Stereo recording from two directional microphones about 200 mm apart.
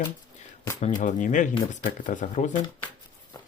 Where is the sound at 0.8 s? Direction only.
40° left (ahead or behind).